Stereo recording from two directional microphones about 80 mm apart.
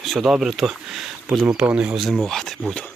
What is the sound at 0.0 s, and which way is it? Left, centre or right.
Speech, centre.